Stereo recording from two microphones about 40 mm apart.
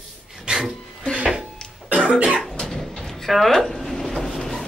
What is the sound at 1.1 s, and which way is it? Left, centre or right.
Music, right.